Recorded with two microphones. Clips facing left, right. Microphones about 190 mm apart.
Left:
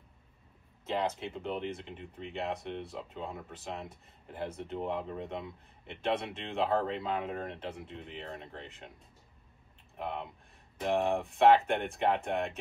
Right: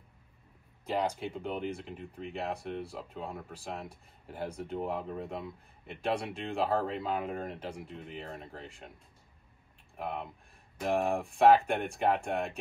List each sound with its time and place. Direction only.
0.8 s speech: centre (ahead or behind)
9.9 s speech: centre (ahead or behind)